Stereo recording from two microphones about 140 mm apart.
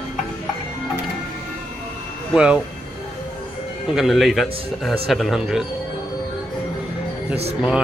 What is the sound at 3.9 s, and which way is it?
Speech, centre (ahead or behind).